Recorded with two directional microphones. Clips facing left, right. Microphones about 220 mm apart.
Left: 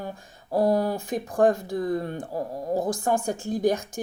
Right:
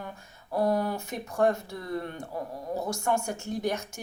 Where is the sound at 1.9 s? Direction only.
35° left (ahead or behind).